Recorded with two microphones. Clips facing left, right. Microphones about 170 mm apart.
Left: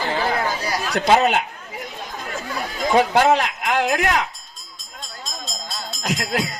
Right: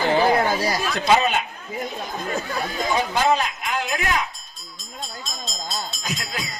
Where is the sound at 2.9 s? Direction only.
75° left (ahead or behind).